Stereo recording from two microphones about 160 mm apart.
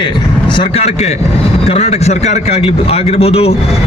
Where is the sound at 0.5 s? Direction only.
40° left (ahead or behind).